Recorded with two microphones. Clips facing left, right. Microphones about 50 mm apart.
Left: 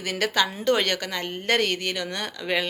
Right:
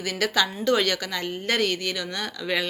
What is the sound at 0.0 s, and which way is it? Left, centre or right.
Speech, left.